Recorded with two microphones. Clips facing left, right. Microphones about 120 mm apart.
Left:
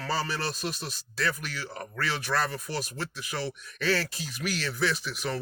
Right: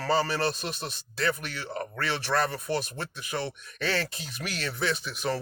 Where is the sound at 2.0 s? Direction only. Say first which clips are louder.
Right 1 dB; 25° right (ahead or behind).